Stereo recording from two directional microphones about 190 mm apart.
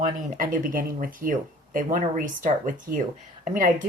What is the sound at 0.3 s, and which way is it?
Speech, 45° right (ahead or behind).